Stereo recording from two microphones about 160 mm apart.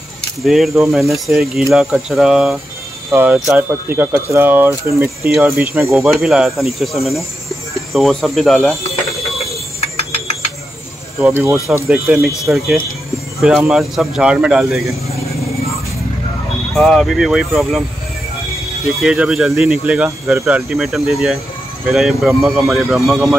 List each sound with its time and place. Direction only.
0.4 s speech: centre (ahead or behind)
3.1 s speech: 15° right (ahead or behind)
3.3 s speech: centre (ahead or behind)
3.9 s speech: 15° right (ahead or behind)
5.9 s speech: centre (ahead or behind)
9.8 s a sound: 40° left (ahead or behind)
11.6 s speech: 15° right (ahead or behind)
16.7 s speech: centre (ahead or behind)
18.9 s speech: 5° right (ahead or behind)